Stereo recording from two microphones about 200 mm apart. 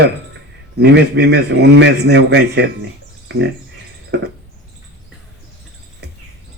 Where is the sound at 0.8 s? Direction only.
60° right (ahead or behind).